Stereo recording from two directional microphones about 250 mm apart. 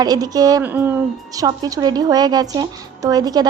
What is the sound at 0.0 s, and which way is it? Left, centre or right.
A woman's voice, centre.